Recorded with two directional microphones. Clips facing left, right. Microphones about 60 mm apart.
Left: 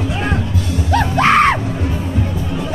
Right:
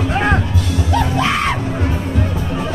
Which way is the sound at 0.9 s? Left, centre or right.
Left.